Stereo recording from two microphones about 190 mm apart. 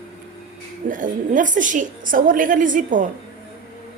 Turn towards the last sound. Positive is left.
turn(degrees=-45)  # may be behind; listen again after turning